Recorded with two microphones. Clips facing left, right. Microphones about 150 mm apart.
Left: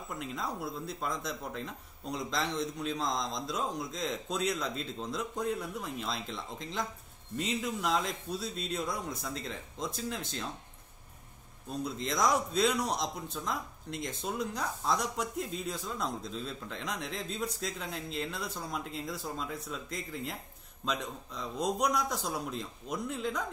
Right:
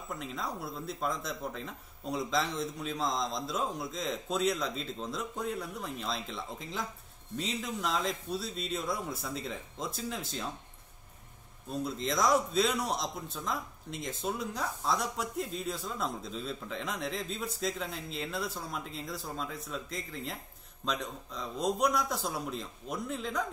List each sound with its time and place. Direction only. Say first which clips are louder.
0.1 s a man's voice: even; centre (ahead or behind)
11.7 s a man's voice: right 2 dB; centre (ahead or behind)